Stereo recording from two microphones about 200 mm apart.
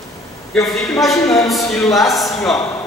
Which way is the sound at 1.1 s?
15° left (ahead or behind).